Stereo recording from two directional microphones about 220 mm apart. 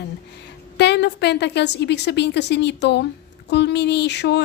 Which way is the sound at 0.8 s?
50° left (ahead or behind).